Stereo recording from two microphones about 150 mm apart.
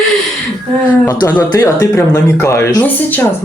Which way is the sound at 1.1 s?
25° left (ahead or behind).